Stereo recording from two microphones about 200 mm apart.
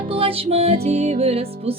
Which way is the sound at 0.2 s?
30° right (ahead or behind).